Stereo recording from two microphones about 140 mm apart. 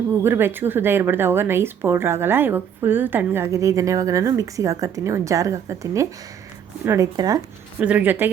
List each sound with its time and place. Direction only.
0.1 s a woman's voice: 15° right (ahead or behind)
7.8 s a woman's voice: 10° right (ahead or behind)